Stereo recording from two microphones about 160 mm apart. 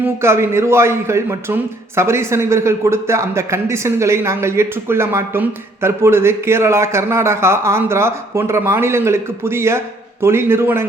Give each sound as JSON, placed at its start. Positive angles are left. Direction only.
{"t": 0.0, "sound": "a man's voice", "side_deg": -15}